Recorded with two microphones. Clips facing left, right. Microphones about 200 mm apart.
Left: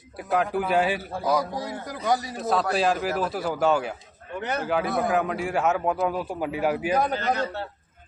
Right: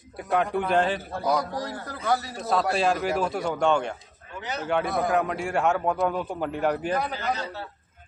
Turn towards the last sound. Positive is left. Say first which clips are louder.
# left 4 dB
turn(degrees=55)  # may be behind; listen again after turning